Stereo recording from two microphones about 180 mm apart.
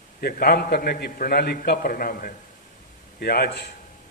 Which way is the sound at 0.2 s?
55° left (ahead or behind).